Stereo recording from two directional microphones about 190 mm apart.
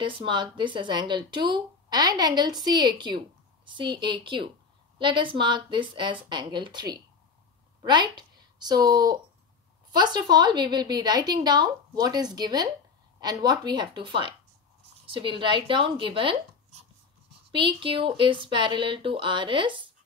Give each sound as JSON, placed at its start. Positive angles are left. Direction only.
{"t": 0.0, "sound": "a woman's voice", "side_deg": -25}
{"t": 17.5, "sound": "speech", "side_deg": -25}